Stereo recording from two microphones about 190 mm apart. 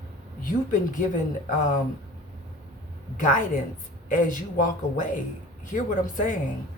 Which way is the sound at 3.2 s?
40° left (ahead or behind).